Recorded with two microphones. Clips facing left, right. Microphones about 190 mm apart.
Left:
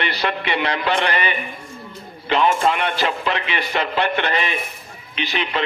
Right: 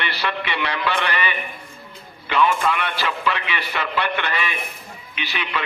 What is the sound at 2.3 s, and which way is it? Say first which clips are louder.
A man's voice: left 2 dB; 40° left (ahead or behind).